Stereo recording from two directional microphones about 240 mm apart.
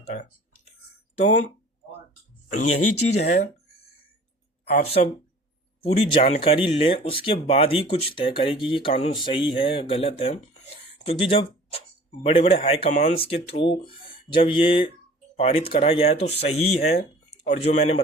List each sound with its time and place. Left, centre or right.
0.0 s speech: left
2.6 s speech: left
3.2 s speech: left
4.8 s speech: left